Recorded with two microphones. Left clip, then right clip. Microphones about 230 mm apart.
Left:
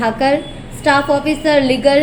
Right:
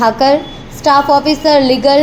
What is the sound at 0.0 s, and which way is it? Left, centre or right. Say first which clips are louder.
Speech: right 5 dB; centre.